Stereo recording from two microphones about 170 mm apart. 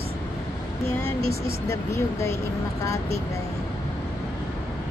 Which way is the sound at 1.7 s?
15° left (ahead or behind).